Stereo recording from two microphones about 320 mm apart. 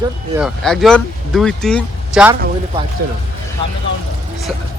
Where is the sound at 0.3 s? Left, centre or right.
Centre.